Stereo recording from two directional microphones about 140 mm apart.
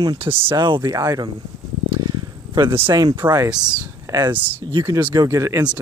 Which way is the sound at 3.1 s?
20° right (ahead or behind).